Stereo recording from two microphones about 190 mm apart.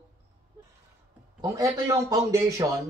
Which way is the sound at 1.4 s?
20° right (ahead or behind).